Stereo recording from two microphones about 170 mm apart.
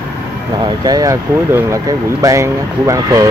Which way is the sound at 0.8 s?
20° right (ahead or behind).